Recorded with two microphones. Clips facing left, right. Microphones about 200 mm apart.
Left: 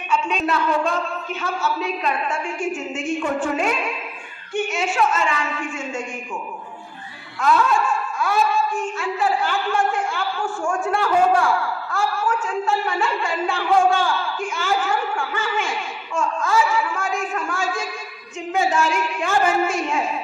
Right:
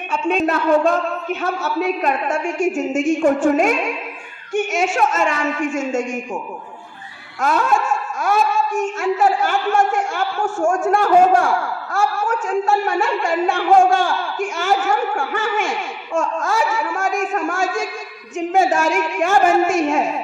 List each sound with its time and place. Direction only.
0.1 s a woman's voice: 50° right (ahead or behind)
7.3 s a woman's voice: 45° right (ahead or behind)
7.9 s dog: 45° right (ahead or behind)
8.9 s a woman's voice: 45° right (ahead or behind)